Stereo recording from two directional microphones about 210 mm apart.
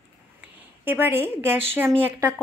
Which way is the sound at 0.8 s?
10° right (ahead or behind).